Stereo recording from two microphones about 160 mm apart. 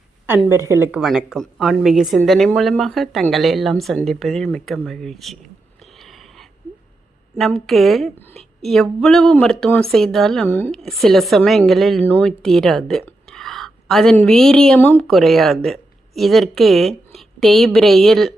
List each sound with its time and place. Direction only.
0.3 s a woman's voice: 15° right (ahead or behind)
0.9 s speech: 5° right (ahead or behind)
4.9 s a sound: centre (ahead or behind)
7.3 s a woman's voice: centre (ahead or behind)